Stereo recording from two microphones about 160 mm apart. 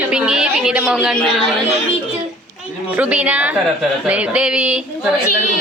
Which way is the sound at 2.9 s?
10° right (ahead or behind).